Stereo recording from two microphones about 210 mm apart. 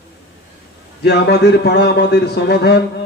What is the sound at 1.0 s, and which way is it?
Speech, 50° left (ahead or behind).